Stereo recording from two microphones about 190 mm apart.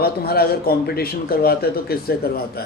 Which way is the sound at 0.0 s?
55° left (ahead or behind).